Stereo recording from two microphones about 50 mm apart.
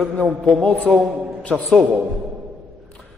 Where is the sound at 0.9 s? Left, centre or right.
Centre.